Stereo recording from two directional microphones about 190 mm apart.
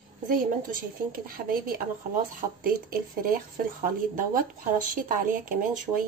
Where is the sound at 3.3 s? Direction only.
45° right (ahead or behind).